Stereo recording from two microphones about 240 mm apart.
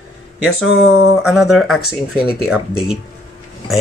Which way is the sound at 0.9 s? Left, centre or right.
Centre.